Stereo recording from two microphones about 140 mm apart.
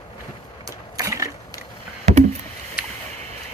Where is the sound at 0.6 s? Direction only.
25° right (ahead or behind).